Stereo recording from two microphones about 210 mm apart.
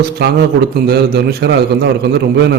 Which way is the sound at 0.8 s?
45° right (ahead or behind).